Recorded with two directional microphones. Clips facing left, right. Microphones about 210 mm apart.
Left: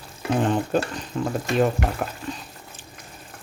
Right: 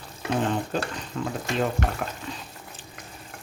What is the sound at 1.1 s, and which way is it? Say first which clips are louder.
Speech: left 4 dB; 25° left (ahead or behind).